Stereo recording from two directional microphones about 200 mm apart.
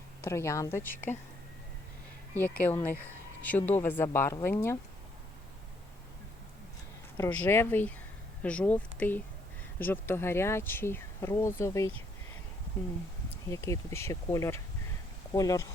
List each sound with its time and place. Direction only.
0.2 s speech: 15° left (ahead or behind)
2.6 s speech: 10° left (ahead or behind)
7.2 s speech: 10° left (ahead or behind)
13.5 s speech: 15° left (ahead or behind)